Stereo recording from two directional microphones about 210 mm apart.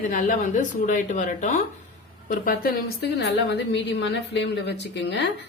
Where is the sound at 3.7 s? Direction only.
55° left (ahead or behind).